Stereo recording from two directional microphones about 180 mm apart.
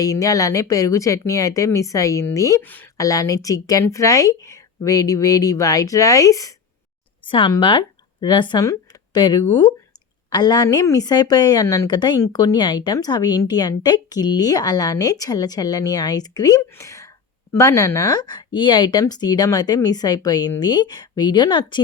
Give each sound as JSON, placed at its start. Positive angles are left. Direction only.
{"t": 0.0, "sound": "a woman's voice", "side_deg": 20}